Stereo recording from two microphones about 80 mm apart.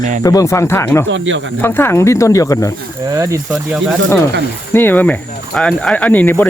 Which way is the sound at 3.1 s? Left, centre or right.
Right.